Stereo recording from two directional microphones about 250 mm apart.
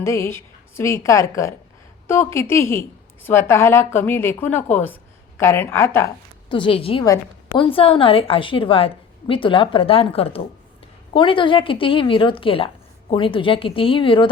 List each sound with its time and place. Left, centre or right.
0.0 s a woman's voice: centre